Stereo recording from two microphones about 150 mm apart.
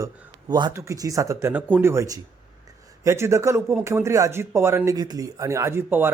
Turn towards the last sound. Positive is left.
turn(degrees=-15)  # may be behind; listen again after turning